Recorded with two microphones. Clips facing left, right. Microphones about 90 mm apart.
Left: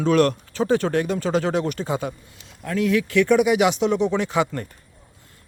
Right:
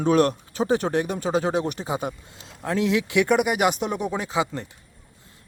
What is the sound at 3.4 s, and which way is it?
Speech, 50° right (ahead or behind).